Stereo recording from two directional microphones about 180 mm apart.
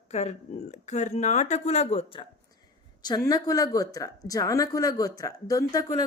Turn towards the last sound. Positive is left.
turn(degrees=20)  # may be behind; listen again after turning